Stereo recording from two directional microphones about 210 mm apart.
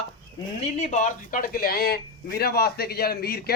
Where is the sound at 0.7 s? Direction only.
35° left (ahead or behind).